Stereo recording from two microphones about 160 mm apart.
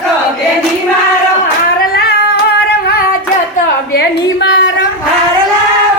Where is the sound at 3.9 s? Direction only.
90° left.